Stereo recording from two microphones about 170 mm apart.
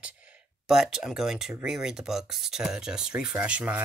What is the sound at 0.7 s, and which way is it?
Speech, 5° right (ahead or behind).